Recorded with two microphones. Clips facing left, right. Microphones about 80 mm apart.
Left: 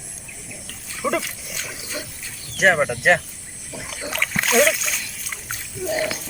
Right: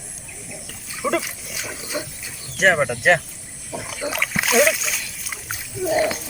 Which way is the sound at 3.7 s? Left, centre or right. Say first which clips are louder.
Right 4 dB; right.